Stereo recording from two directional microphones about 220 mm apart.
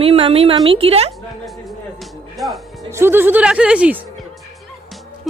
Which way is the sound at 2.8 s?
10° right (ahead or behind).